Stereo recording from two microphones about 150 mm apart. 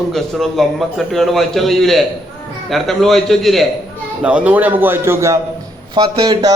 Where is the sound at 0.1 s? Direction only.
Centre (ahead or behind).